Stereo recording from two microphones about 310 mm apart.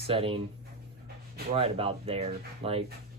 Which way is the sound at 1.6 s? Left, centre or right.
Centre.